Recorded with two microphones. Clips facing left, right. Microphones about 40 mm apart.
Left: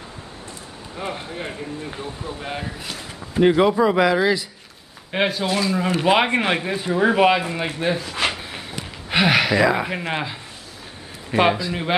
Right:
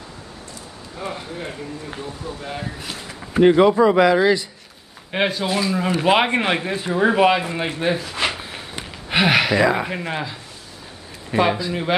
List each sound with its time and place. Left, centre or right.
0.9 s a man's voice: left
2.6 s speech: centre
10.0 s a man's voice: left
11.3 s a man's voice: centre